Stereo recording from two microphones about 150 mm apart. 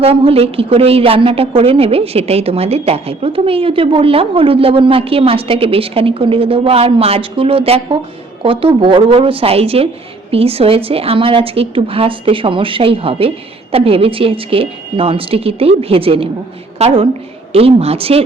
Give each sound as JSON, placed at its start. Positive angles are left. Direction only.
{"t": 0.0, "sound": "a woman's voice", "side_deg": -40}